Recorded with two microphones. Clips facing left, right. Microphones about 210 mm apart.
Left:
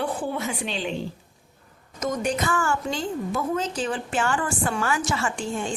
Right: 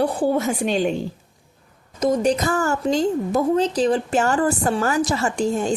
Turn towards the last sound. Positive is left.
turn(degrees=-40)  # may be behind; listen again after turning